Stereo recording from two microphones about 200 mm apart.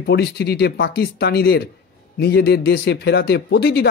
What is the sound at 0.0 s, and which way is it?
Speech, 55° left (ahead or behind).